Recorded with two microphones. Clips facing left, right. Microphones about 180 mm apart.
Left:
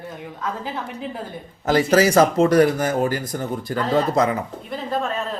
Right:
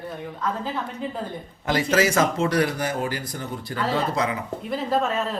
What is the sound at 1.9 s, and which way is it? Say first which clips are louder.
Speech: left 5 dB; 35° left (ahead or behind).